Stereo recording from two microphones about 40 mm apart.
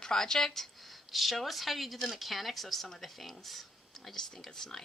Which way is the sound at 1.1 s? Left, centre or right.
Centre.